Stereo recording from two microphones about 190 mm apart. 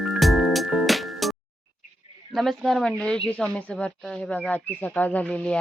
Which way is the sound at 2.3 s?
Centre (ahead or behind).